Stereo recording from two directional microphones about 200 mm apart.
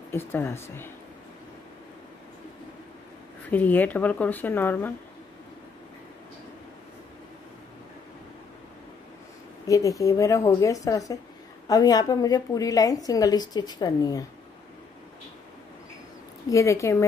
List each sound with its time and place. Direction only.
0.1 s speech: 10° left (ahead or behind)
3.4 s speech: 10° left (ahead or behind)
9.7 s a woman's voice: 15° left (ahead or behind)
16.4 s speech: 15° left (ahead or behind)